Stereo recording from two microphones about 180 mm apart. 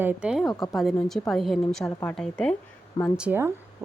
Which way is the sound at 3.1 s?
10° right (ahead or behind).